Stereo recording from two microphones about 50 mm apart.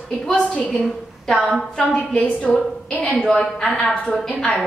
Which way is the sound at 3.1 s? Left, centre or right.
Centre.